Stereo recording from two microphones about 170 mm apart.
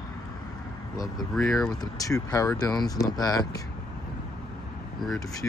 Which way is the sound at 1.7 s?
20° left (ahead or behind).